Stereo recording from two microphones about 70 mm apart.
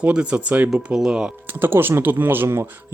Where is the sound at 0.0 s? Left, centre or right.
Centre.